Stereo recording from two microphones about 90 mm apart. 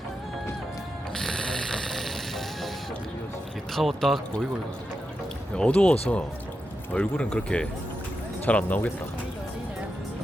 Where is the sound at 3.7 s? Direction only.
Centre (ahead or behind).